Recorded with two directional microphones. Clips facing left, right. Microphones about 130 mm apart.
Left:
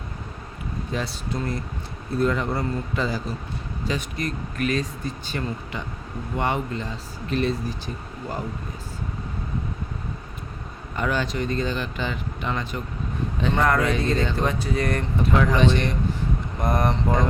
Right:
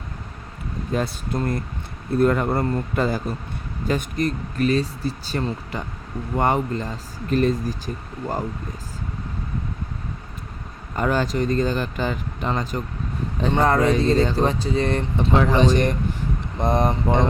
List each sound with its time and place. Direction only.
0.9 s speech: 50° right (ahead or behind)
4.5 s speech: 35° right (ahead or behind)
10.9 s speech: 40° right (ahead or behind)
13.4 s speech: 30° right (ahead or behind)
16.6 s speech: 25° right (ahead or behind)